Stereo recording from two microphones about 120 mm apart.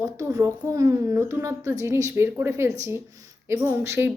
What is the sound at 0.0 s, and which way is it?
A woman's voice, 25° right (ahead or behind).